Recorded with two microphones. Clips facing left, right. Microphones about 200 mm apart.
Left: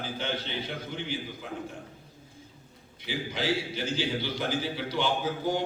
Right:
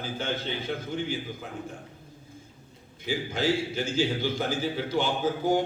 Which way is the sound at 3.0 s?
45° right (ahead or behind).